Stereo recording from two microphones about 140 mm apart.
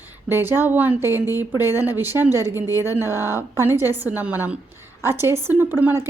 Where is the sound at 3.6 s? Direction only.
15° right (ahead or behind).